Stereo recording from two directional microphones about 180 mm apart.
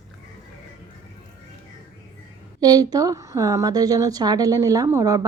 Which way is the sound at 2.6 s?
20° right (ahead or behind).